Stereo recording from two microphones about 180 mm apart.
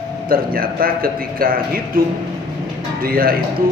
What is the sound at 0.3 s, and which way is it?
Speech, 55° right (ahead or behind).